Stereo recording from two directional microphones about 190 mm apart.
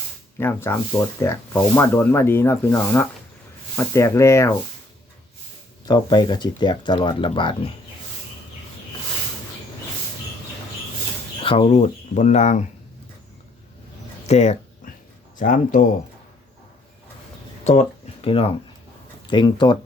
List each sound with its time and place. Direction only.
0.3 s speech: 10° left (ahead or behind)
5.8 s speech: 20° left (ahead or behind)
11.4 s speech: 30° left (ahead or behind)
14.3 s a sound: 35° left (ahead or behind)
15.4 s speech: 45° left (ahead or behind)
17.6 s speech: 35° left (ahead or behind)